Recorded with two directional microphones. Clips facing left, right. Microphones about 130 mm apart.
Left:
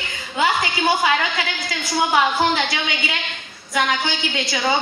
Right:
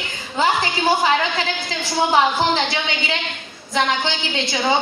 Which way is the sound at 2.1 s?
30° right (ahead or behind).